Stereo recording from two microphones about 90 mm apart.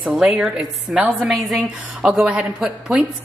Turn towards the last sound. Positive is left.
turn(degrees=-5)  # may be behind; listen again after turning